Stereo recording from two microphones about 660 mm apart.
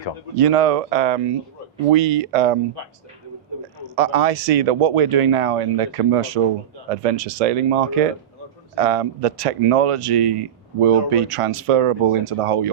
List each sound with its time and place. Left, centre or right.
0.3 s speech: right
1.9 s speech: right
3.9 s speech: right